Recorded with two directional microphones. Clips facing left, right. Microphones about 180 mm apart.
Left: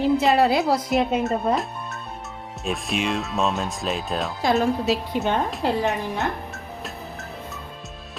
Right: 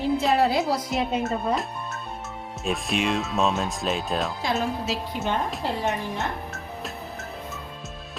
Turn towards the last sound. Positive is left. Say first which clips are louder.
# even
turn(degrees=0)  # may be behind; listen again after turning